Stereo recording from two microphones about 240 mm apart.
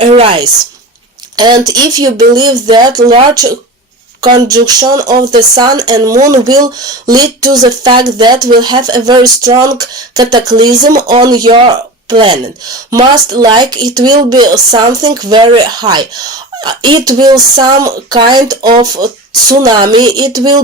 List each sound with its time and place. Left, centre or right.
0.0 s speech: right